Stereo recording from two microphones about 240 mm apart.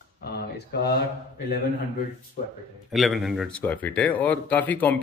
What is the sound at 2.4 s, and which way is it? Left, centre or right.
Speech, left.